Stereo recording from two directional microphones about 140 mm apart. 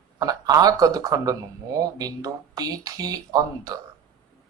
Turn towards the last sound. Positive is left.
turn(degrees=-25)  # may be behind; listen again after turning